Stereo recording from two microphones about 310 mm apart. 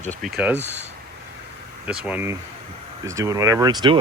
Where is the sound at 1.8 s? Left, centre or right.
Centre.